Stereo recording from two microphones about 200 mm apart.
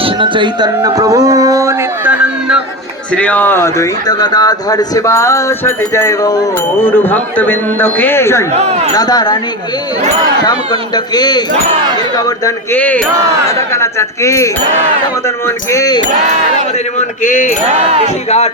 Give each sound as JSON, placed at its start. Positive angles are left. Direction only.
{"t": 0.0, "sound": "a sound", "side_deg": -25}
{"t": 3.2, "sound": "speech", "side_deg": 5}
{"t": 8.5, "sound": "speech", "side_deg": -30}
{"t": 9.0, "sound": "speech", "side_deg": 20}
{"t": 10.4, "sound": "speech", "side_deg": 20}
{"t": 17.2, "sound": "a sound", "side_deg": 40}